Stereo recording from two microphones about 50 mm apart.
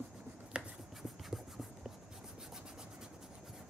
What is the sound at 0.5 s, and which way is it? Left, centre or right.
Writing, centre.